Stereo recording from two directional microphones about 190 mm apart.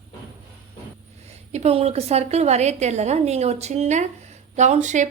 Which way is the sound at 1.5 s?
35° right (ahead or behind).